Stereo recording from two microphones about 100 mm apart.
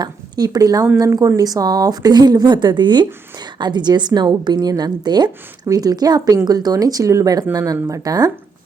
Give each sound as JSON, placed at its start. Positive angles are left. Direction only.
{"t": 0.0, "sound": "a woman's voice", "side_deg": -40}